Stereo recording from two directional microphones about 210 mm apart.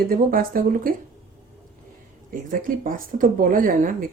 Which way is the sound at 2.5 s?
40° right (ahead or behind).